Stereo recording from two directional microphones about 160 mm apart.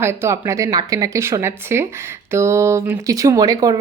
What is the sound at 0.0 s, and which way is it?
Speech, 15° right (ahead or behind).